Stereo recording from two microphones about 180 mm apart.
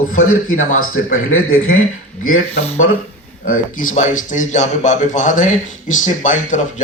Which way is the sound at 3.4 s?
45° left (ahead or behind).